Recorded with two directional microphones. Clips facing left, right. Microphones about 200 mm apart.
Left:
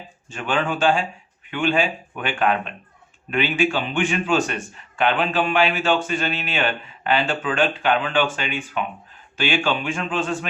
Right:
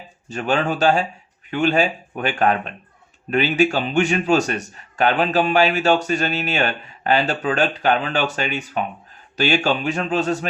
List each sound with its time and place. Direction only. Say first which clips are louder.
0.3 s a man's voice: right 3 dB; 40° right (ahead or behind)